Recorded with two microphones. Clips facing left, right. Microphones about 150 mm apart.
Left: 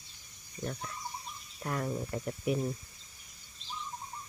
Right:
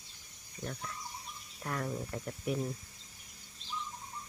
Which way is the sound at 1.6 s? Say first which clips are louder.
Left 3 dB; 10° left (ahead or behind).